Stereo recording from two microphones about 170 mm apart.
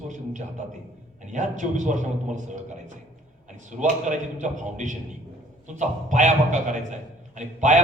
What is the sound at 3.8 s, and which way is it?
A man's voice, 45° right (ahead or behind).